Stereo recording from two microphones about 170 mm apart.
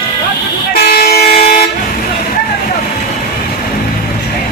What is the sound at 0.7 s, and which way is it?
Toot, 60° left (ahead or behind).